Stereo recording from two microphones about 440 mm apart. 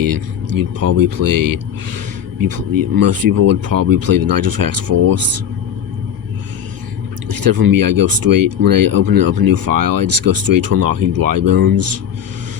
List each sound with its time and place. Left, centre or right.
0.0 s speech: right
2.7 s speech: right
7.3 s speech: right